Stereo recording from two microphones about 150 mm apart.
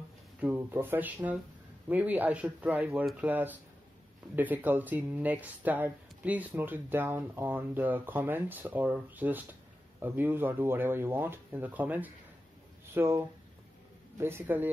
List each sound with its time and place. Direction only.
0.4 s speech: 10° right (ahead or behind)